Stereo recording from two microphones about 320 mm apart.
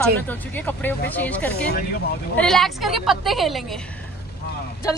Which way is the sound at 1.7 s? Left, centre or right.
Left.